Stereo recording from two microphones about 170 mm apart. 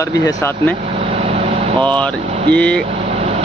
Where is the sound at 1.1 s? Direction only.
35° right (ahead or behind).